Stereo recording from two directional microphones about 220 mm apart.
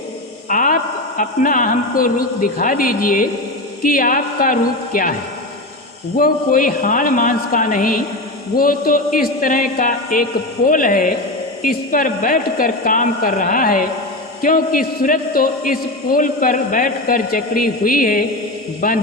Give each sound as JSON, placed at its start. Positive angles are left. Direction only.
{"t": 0.4, "sound": "a woman's voice", "side_deg": 35}
{"t": 6.1, "sound": "a man's voice", "side_deg": 40}